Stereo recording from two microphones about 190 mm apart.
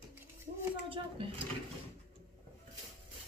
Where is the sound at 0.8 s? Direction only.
30° right (ahead or behind).